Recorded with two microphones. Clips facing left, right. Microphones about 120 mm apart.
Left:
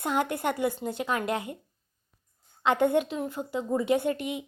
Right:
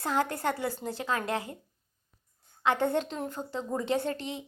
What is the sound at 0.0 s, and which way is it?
A woman's voice, 20° left (ahead or behind).